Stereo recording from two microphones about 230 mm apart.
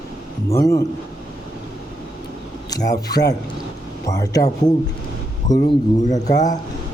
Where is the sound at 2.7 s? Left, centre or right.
Centre.